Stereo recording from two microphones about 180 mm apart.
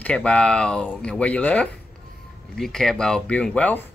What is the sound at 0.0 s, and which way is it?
Speech, 5° left (ahead or behind).